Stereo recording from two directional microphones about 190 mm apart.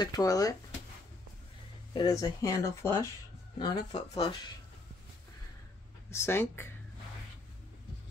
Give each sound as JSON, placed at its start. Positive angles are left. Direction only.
{"t": 0.0, "sound": "speech", "side_deg": 20}
{"t": 2.0, "sound": "speech", "side_deg": 20}
{"t": 6.0, "sound": "speech", "side_deg": 15}